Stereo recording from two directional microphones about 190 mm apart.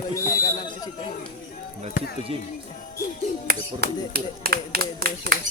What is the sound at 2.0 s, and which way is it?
Speech, 45° left (ahead or behind).